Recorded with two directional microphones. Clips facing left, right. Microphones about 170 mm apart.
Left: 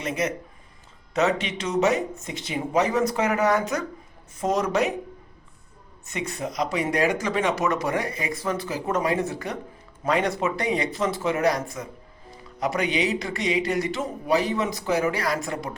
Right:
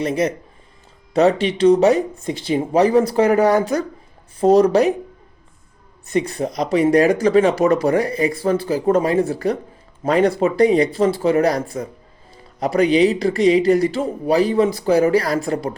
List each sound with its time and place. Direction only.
0.0 s speech: 35° right (ahead or behind)
6.1 s speech: 35° right (ahead or behind)